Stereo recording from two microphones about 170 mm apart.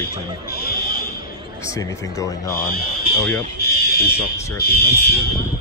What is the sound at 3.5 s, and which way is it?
Fire alarm, 65° left (ahead or behind).